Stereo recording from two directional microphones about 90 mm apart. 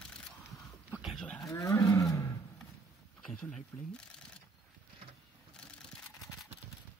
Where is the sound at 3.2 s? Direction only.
10° left (ahead or behind).